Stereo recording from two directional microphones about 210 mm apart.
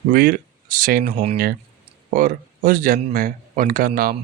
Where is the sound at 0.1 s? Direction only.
45° right (ahead or behind).